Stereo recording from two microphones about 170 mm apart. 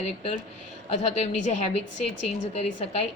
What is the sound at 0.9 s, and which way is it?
A woman's voice, 40° left (ahead or behind).